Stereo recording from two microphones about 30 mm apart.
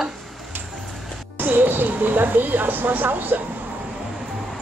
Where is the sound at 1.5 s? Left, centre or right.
Right.